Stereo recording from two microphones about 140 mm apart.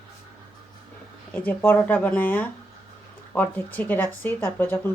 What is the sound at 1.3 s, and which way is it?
Speech, 10° left (ahead or behind).